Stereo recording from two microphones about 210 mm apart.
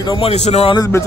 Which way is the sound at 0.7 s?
15° left (ahead or behind).